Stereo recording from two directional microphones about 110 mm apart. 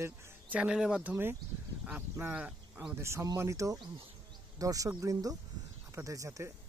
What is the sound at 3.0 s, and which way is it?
Speech, 25° right (ahead or behind).